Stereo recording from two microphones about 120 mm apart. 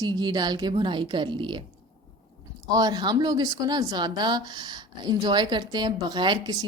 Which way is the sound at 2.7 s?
35° right (ahead or behind).